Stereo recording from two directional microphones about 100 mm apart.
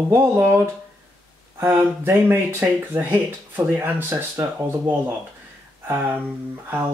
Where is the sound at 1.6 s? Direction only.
20° right (ahead or behind).